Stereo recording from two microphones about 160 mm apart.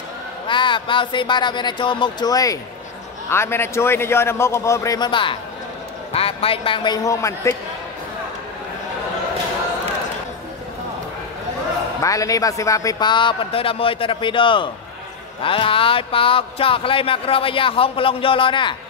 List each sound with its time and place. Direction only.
0.5 s a man's voice: 30° left (ahead or behind)
12.0 s speech: 20° left (ahead or behind)